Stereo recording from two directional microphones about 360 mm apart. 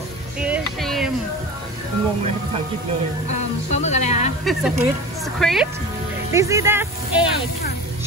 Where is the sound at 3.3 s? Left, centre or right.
Centre.